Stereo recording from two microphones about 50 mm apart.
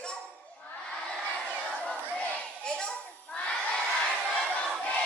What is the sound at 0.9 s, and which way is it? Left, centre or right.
Crowd, centre.